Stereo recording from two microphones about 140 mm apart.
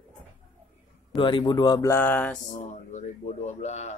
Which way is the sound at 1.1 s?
35° left (ahead or behind).